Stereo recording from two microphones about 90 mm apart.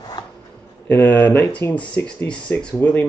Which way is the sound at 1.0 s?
20° left (ahead or behind).